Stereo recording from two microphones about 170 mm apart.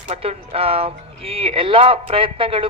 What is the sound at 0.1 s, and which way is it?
Speech, 35° right (ahead or behind).